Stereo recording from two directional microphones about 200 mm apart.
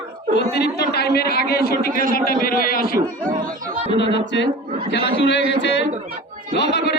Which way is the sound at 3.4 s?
45° right (ahead or behind).